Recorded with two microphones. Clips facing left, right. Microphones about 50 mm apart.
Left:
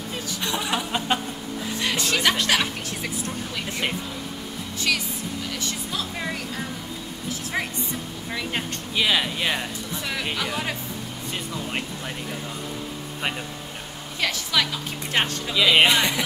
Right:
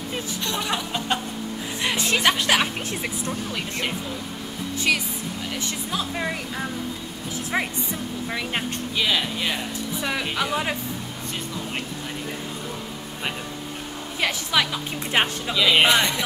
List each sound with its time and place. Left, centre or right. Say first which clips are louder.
0.4 s speech: left 2 dB; centre
1.8 s speech: right 1 dB; centre
4.9 s a woman's voice: right 2 dB; centre
7.5 s a woman's voice: right 3 dB; centre
8.9 s speech: left 2 dB; centre
10.3 s a woman's voice: right 3 dB; centre
14.2 s a woman's voice: right 1 dB; centre
15.5 s speech: even; centre